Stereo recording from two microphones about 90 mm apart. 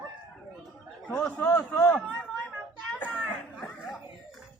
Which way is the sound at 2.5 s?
10° right (ahead or behind).